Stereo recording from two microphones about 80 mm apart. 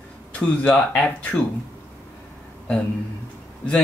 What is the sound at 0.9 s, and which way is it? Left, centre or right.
Speech, centre.